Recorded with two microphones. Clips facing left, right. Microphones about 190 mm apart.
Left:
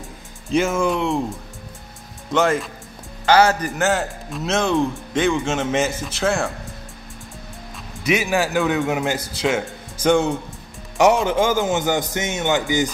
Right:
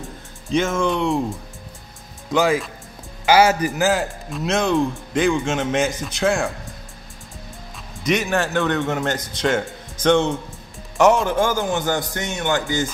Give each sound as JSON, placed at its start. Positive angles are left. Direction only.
{"t": 0.0, "sound": "speech", "side_deg": 5}
{"t": 8.0, "sound": "a man's voice", "side_deg": 5}